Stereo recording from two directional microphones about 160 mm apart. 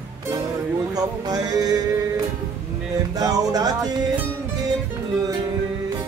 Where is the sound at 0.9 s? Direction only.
25° right (ahead or behind).